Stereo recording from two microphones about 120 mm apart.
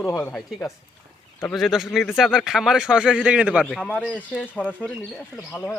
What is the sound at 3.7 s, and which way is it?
Speech, 10° left (ahead or behind).